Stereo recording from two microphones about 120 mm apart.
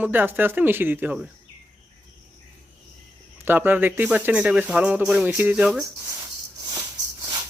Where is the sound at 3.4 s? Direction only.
15° right (ahead or behind).